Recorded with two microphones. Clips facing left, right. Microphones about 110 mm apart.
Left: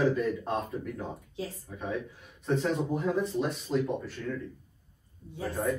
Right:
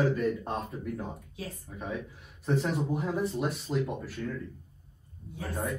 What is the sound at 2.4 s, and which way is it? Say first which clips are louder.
A man's voice: left 1 dB; centre (ahead or behind).